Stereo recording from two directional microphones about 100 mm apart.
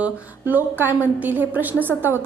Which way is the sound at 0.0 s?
15° right (ahead or behind).